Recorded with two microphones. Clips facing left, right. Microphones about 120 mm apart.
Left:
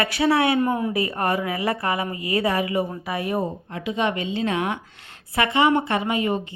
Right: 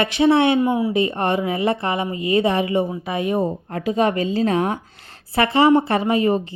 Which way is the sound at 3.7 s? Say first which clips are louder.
Right 5 dB; 40° right (ahead or behind).